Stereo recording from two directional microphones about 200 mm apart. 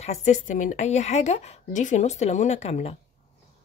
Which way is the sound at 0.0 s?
35° left (ahead or behind).